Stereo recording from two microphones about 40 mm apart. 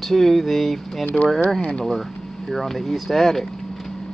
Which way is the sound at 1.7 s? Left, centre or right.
Left.